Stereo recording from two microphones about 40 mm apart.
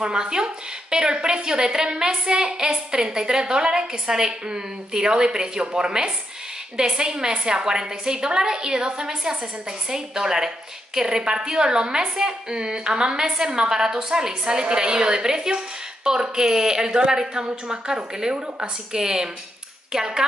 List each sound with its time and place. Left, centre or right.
0.0 s a woman's voice: right